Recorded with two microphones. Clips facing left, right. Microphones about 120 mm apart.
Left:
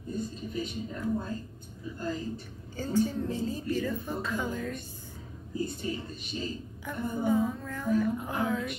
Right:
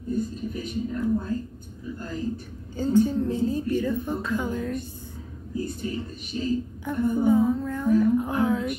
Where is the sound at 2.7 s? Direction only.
15° right (ahead or behind).